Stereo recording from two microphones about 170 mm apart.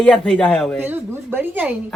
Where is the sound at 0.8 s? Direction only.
15° right (ahead or behind).